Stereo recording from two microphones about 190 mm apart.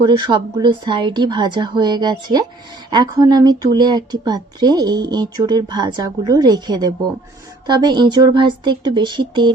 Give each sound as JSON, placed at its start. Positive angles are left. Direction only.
{"t": 0.0, "sound": "speech", "side_deg": -25}